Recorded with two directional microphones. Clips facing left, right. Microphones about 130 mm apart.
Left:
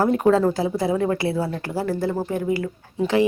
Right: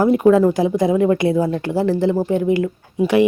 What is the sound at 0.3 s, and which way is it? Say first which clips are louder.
Speech: right 6 dB; 15° right (ahead or behind).